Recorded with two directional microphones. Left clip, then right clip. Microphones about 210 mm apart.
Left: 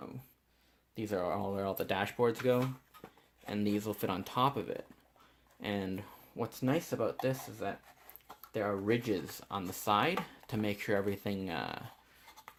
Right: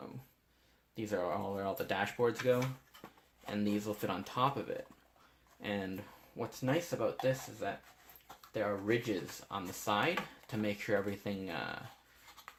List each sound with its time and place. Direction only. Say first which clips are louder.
0.9 s speech: left 1 dB; 40° left (ahead or behind)
3.5 s speech: left 1 dB; 40° left (ahead or behind)
5.6 s speech: left 1 dB; 40° left (ahead or behind)
12.5 s writing: right 1 dB; 40° left (ahead or behind)